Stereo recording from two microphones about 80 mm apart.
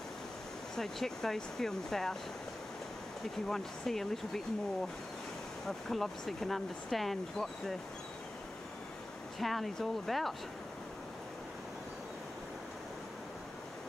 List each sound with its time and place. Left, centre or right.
0.7 s speech: centre
3.4 s speech: centre
5.7 s speech: centre
9.4 s speech: centre